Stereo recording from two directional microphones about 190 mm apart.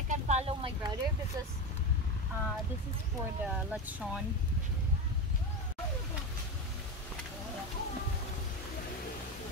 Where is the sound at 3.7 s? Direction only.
5° right (ahead or behind).